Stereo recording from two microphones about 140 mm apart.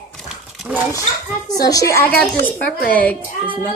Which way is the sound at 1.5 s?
25° left (ahead or behind).